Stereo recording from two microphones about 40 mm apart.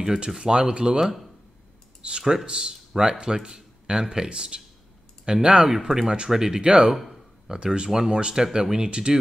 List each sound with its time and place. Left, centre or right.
0.4 s speech: centre
2.0 s speech: right
6.0 s speech: right
6.9 s a sound: centre
7.5 s speech: right